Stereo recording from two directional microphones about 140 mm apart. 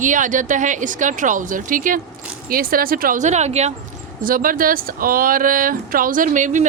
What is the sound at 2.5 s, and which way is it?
Speech, 90° right.